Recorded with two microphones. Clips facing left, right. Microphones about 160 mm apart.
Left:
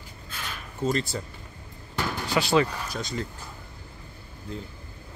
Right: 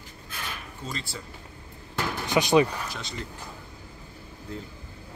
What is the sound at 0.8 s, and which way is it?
Speech, 45° left (ahead or behind).